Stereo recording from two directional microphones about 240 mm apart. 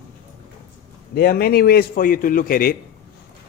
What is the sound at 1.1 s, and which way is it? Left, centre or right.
Speech, left.